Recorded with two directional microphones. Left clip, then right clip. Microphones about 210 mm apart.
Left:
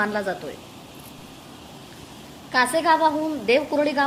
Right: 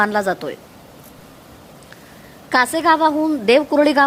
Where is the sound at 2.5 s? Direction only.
55° right (ahead or behind).